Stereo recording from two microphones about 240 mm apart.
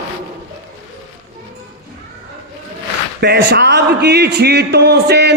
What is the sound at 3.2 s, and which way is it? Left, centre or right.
A man's voice, right.